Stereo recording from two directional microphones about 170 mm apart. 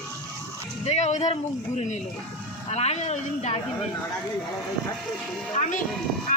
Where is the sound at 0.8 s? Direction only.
40° left (ahead or behind).